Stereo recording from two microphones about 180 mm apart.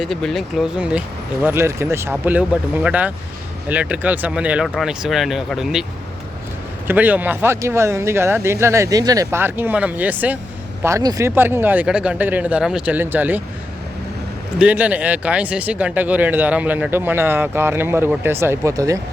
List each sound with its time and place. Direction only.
0.0 s speech: centre (ahead or behind)
6.8 s speech: 10° right (ahead or behind)
14.6 s speech: 10° right (ahead or behind)